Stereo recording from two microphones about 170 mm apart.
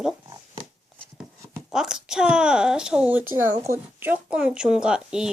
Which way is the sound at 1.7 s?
5° right (ahead or behind).